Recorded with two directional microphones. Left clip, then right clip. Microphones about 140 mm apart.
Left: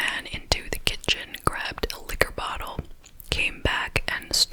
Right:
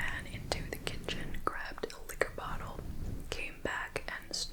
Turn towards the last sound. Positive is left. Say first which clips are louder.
# left 15 dB
turn(degrees=40)  # may be behind; listen again after turning